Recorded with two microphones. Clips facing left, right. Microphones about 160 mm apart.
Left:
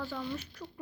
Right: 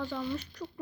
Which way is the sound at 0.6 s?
10° right (ahead or behind).